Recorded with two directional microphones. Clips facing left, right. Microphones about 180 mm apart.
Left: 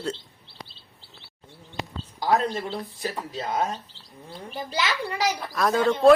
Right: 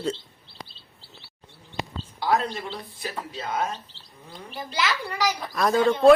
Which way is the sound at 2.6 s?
40° left (ahead or behind).